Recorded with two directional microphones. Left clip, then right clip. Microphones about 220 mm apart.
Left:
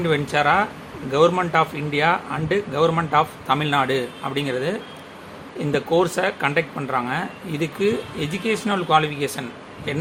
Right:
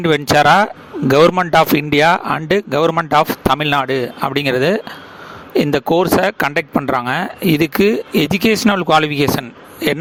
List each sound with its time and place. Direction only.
0.0 s speech: 50° right (ahead or behind)